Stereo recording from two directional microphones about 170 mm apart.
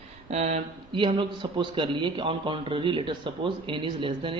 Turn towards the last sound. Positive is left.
turn(degrees=-30)  # may be behind; listen again after turning